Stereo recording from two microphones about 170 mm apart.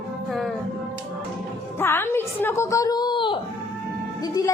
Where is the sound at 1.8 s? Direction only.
15° left (ahead or behind).